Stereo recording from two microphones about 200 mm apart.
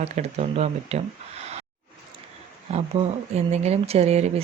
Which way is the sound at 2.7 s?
35° right (ahead or behind).